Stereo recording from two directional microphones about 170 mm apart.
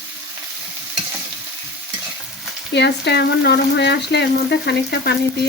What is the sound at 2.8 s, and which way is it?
Frying, 80° left.